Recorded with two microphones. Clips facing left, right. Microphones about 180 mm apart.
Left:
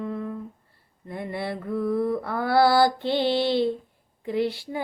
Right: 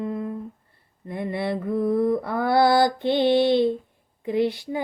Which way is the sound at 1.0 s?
20° right (ahead or behind).